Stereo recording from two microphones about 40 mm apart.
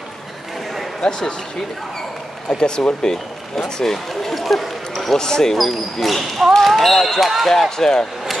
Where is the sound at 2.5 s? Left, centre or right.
Left.